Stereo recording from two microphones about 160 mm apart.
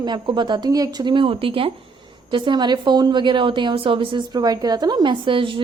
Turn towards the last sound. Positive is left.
turn(degrees=-30)  # may be behind; listen again after turning